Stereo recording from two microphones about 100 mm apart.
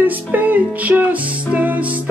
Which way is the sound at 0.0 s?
15° right (ahead or behind).